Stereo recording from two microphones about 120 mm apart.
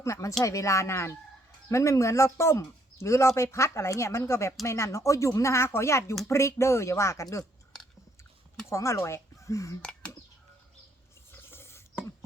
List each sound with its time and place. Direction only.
0.0 s speech: 25° left (ahead or behind)
8.7 s speech: 25° left (ahead or behind)
11.3 s a sound: 20° left (ahead or behind)